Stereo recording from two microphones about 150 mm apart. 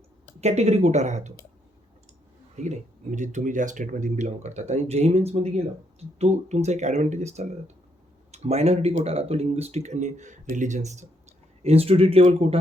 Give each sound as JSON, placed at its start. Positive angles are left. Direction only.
{"t": 0.4, "sound": "speech", "side_deg": -45}
{"t": 2.6, "sound": "speech", "side_deg": -55}